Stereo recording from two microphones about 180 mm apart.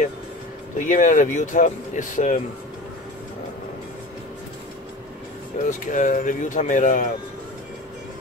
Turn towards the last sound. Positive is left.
turn(degrees=45)  # may be behind; listen again after turning